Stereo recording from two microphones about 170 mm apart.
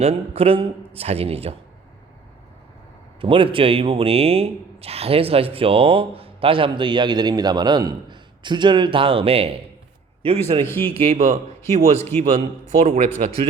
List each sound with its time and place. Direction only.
0.0 s speech: 35° right (ahead or behind)
3.2 s speech: 30° right (ahead or behind)
10.7 s a man's voice: 15° left (ahead or behind)
10.9 s speech: 35° right (ahead or behind)